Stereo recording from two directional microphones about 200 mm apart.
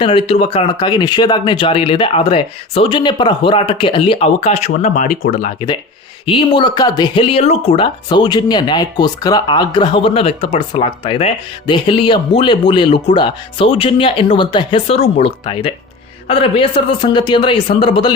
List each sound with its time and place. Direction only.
0.0 s speech: 25° left (ahead or behind)
6.2 s speech: 25° left (ahead or behind)